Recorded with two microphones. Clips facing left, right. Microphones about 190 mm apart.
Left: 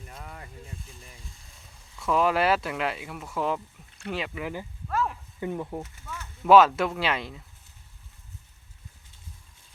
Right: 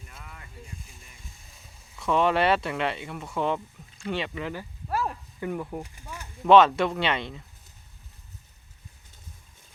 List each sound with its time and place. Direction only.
0.1 s a sound: 35° left (ahead or behind)
2.0 s speech: 5° left (ahead or behind)
4.9 s a sound: 30° right (ahead or behind)
5.4 s speech: 20° left (ahead or behind)
5.8 s snake: 15° right (ahead or behind)
6.5 s speech: 5° left (ahead or behind)